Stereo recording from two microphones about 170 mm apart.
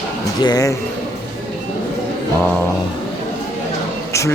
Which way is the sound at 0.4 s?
20° left (ahead or behind).